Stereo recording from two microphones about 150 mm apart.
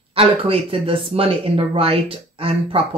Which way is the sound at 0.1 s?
40° right (ahead or behind).